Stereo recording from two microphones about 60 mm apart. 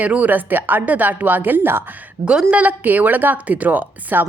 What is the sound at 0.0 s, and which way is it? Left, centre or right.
Speech, right.